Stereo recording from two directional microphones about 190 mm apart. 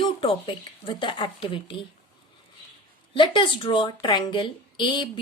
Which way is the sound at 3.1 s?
25° left (ahead or behind).